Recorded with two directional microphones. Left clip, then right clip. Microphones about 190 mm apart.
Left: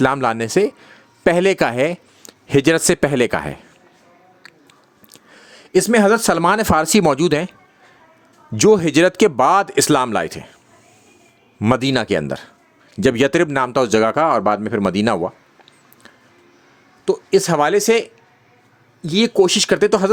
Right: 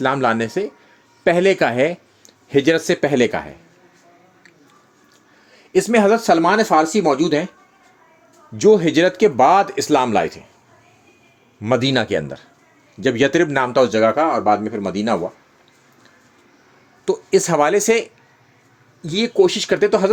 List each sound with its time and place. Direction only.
0.0 s speech: 40° left (ahead or behind)
5.4 s speech: 35° left (ahead or behind); by 7.5 s 50° left (ahead or behind)
8.5 s speech: 50° left (ahead or behind)
11.6 s speech: 40° left (ahead or behind)
17.1 s speech: 15° left (ahead or behind)
19.3 s speech: 30° left (ahead or behind)